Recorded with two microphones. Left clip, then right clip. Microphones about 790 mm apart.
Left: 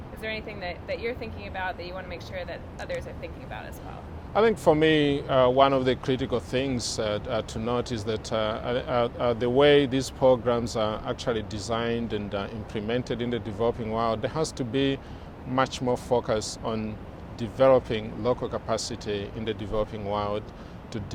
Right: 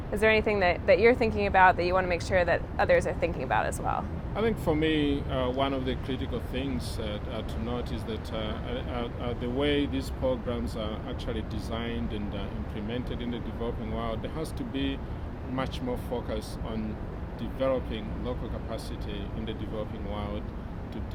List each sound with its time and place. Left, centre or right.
0.2 s speech: right
4.4 s speech: left
16.1 s speech: left